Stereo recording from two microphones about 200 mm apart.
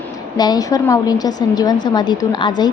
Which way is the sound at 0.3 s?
20° left (ahead or behind).